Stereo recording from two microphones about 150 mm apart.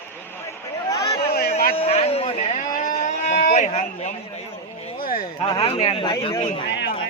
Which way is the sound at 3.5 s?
50° left (ahead or behind).